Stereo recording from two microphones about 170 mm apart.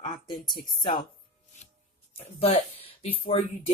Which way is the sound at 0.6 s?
25° left (ahead or behind).